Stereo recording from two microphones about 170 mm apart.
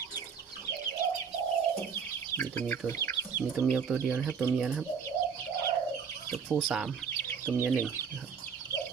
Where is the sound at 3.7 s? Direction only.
10° right (ahead or behind).